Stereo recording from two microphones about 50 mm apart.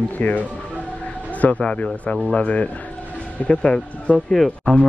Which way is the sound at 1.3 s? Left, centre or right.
Left.